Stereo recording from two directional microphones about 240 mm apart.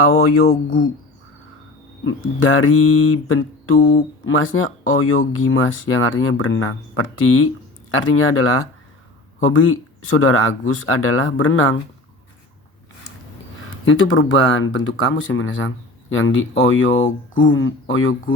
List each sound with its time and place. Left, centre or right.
0.1 s speech: left
2.4 s speech: left
13.8 s speech: left